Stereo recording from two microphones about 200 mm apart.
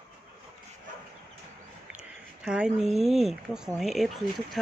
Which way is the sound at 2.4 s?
5° right (ahead or behind).